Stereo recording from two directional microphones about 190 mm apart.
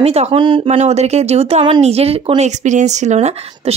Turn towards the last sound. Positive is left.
turn(degrees=-35)  # may be behind; listen again after turning